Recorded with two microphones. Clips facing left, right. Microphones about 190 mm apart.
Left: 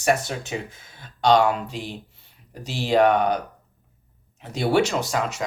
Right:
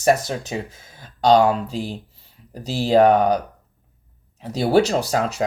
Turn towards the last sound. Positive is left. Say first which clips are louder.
# right 4 dB
turn(degrees=-35)  # may be behind; listen again after turning